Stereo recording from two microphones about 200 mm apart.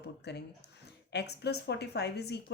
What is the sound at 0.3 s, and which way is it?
Speech, 55° left (ahead or behind).